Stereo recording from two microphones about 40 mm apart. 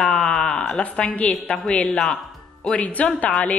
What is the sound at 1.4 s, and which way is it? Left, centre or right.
Speech, left.